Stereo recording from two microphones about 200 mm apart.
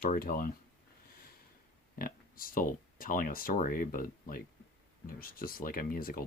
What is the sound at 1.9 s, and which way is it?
Speech, 45° left (ahead or behind).